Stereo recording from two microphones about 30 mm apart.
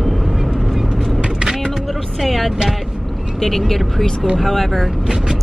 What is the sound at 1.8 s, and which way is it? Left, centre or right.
Music, centre.